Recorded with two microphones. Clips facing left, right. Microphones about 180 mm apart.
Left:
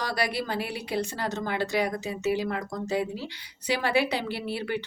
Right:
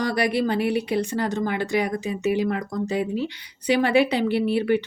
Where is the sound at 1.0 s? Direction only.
55° right (ahead or behind).